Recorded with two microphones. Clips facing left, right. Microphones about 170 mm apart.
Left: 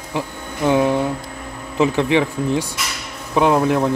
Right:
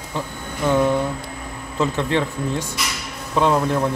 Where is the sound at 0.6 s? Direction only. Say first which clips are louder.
Left 2 dB; 15° left (ahead or behind).